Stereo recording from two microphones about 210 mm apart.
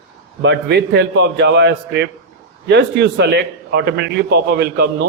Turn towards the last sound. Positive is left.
turn(degrees=-50)  # may be behind; listen again after turning